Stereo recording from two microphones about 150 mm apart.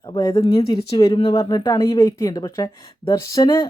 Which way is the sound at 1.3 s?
20° left (ahead or behind).